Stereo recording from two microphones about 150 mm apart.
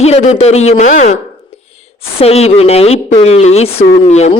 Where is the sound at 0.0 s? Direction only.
45° left (ahead or behind).